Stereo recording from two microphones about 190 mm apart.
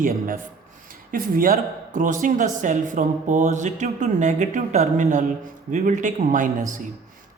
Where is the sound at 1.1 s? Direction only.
45° right (ahead or behind).